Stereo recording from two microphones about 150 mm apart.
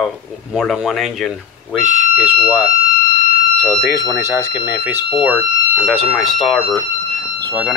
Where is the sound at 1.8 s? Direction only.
10° right (ahead or behind).